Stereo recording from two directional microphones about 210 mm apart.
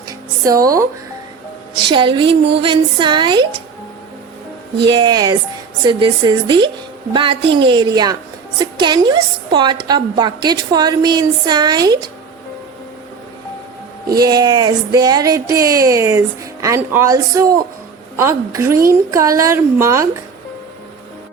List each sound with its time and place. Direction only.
0.1 s music: 15° right (ahead or behind)
1.9 s a woman's voice: 25° right (ahead or behind)
4.9 s a woman's voice: 20° right (ahead or behind)
14.1 s a sound: 15° right (ahead or behind)